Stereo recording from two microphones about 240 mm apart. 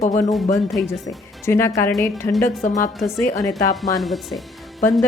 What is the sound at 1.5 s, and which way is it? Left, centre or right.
A woman's voice, centre.